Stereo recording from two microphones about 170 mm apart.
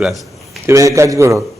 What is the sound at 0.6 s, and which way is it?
Speech, 20° right (ahead or behind).